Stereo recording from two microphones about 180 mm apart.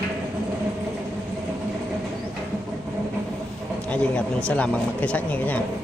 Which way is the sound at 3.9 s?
5° left (ahead or behind).